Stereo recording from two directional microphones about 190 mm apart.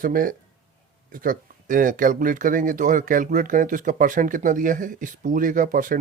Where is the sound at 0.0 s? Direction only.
45° right (ahead or behind).